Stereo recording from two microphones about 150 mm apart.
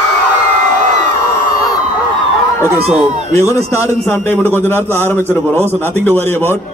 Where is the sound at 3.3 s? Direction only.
20° left (ahead or behind).